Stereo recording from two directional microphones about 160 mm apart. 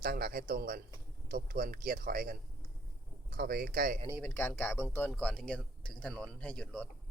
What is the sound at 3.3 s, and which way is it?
Speech, 75° right (ahead or behind).